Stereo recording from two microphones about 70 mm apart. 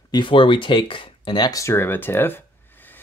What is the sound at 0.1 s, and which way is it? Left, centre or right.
Speech, left.